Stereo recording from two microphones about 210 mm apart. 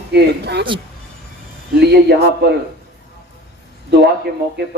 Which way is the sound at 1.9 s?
50° right (ahead or behind).